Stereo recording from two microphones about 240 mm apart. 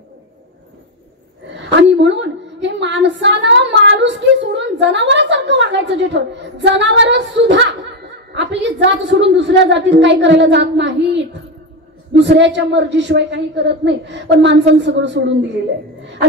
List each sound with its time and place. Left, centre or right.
1.7 s a sound: right
2.6 s female singing: right
8.4 s a woman's voice: right